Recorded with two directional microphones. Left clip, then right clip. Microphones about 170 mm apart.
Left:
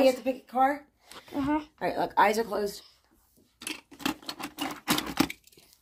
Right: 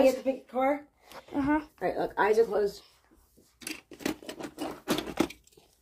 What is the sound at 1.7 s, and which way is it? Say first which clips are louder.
Speech: left 4 dB; 80° left.